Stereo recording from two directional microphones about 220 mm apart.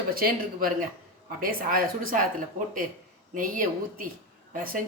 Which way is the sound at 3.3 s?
35° right (ahead or behind).